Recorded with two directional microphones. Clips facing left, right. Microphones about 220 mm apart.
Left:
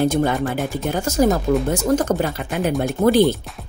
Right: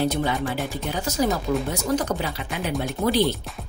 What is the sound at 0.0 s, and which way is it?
Speech, 50° left (ahead or behind).